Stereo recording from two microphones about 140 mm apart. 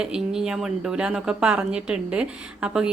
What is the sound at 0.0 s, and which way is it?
Speech, 5° right (ahead or behind).